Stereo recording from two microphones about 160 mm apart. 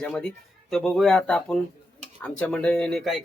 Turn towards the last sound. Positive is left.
turn(degrees=0)  # may be behind; listen again after turning